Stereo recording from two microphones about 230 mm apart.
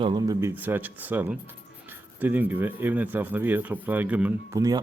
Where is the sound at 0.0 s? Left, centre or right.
Centre.